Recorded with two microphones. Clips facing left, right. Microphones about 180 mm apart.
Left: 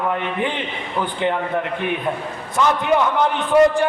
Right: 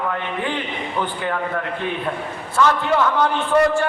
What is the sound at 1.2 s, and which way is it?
A man's voice, 20° left (ahead or behind).